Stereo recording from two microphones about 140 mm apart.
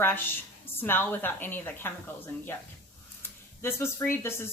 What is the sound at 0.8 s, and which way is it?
A woman's voice, 15° left (ahead or behind).